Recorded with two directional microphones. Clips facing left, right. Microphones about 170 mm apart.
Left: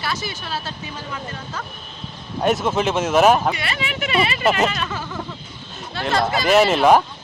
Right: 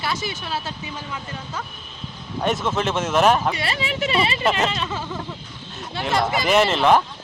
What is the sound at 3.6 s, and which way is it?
Speech, 35° right (ahead or behind).